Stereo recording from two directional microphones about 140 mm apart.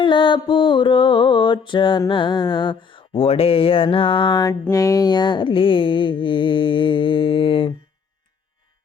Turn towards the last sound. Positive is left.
turn(degrees=40)  # may be behind; listen again after turning